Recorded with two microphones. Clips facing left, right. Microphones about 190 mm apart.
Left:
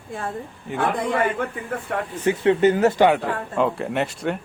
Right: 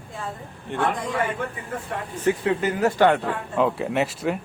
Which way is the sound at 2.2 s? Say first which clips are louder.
Left 5 dB; 25° left (ahead or behind).